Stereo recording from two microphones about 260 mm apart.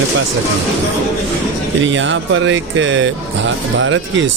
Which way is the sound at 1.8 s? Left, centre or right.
Right.